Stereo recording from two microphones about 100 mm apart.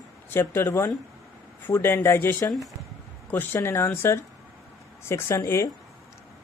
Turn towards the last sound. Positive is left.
turn(degrees=30)  # may be behind; listen again after turning